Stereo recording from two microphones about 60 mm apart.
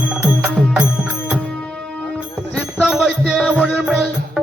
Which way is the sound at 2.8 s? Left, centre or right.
Centre.